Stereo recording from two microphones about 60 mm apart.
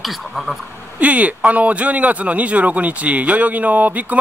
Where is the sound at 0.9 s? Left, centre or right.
Right.